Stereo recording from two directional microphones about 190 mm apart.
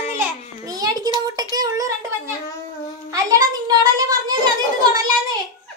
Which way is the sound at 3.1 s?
20° right (ahead or behind).